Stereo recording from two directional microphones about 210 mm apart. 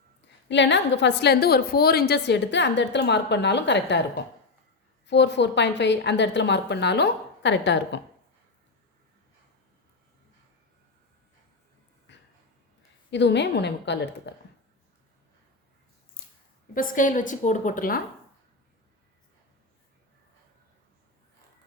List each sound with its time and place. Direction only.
0.4 s a woman's voice: 55° left (ahead or behind)
5.0 s a woman's voice: 55° left (ahead or behind)
12.1 s a sound: 60° left (ahead or behind)
13.1 s a woman's voice: 55° left (ahead or behind)
16.7 s a woman's voice: 40° left (ahead or behind)